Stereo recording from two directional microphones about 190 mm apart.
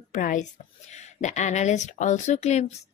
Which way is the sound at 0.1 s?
40° left (ahead or behind).